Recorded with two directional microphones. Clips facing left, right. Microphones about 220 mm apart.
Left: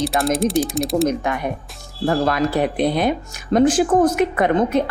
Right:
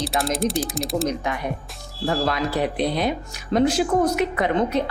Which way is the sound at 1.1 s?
55° left (ahead or behind).